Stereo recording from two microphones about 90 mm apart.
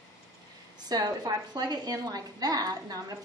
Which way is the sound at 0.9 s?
45° right (ahead or behind).